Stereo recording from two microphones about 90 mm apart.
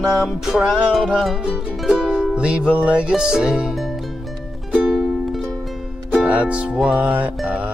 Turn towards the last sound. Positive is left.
turn(degrees=-15)  # may be behind; listen again after turning